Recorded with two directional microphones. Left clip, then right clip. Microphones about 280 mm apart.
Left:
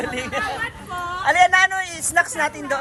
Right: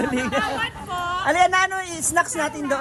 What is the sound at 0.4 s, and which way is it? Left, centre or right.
Hubbub, centre.